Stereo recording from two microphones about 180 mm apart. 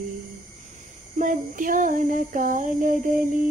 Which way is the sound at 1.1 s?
45° right (ahead or behind).